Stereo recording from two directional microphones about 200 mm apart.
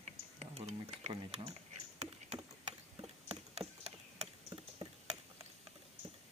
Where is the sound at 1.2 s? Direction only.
25° right (ahead or behind).